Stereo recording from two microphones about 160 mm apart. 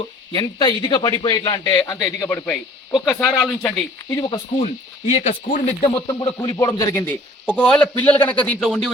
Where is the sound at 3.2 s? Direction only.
Centre (ahead or behind).